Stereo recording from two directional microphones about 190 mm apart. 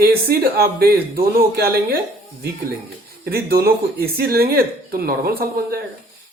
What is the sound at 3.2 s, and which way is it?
Speech, 55° right (ahead or behind).